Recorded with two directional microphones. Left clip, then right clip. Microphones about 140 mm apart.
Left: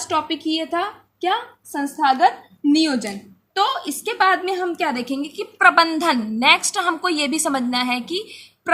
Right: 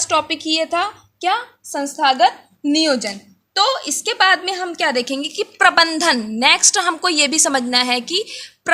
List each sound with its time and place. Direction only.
0.1 s a woman's voice: 60° right (ahead or behind)